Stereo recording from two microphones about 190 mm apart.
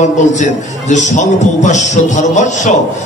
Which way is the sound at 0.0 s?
40° left (ahead or behind).